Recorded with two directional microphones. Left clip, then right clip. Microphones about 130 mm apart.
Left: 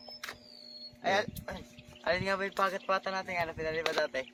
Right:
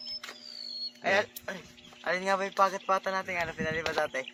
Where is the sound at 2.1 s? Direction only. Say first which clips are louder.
Right 8 dB; 90° right.